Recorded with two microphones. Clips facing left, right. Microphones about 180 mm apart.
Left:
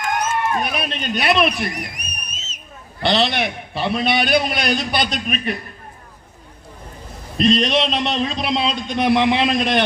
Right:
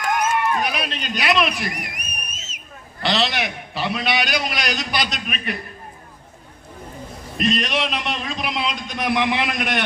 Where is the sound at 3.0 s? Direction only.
55° left (ahead or behind).